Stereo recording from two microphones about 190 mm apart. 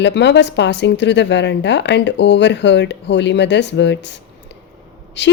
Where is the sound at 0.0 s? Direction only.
65° left (ahead or behind).